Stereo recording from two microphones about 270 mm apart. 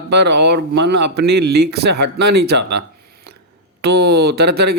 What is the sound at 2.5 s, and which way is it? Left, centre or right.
Speech, right.